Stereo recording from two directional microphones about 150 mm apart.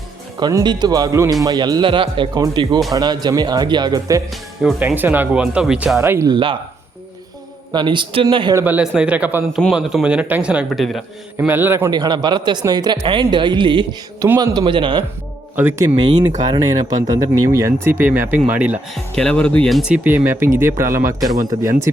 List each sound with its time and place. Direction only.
0.3 s speech: 30° right (ahead or behind)
4.8 s speech: 10° right (ahead or behind)
6.0 s speech: 15° right (ahead or behind)
6.3 s speech: 35° right (ahead or behind)
7.7 s speech: 30° right (ahead or behind)
8.5 s a man's voice: 10° right (ahead or behind)
11.3 s speech: 15° right (ahead or behind)
11.9 s speech: 30° right (ahead or behind)
15.5 s speech: 15° right (ahead or behind)
16.0 s speech: 30° right (ahead or behind); by 18.8 s 10° right (ahead or behind)
18.9 s speech: 5° left (ahead or behind); by 21.8 s 20° right (ahead or behind)